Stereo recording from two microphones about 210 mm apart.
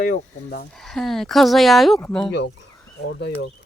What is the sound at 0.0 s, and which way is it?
Speech, 45° left (ahead or behind).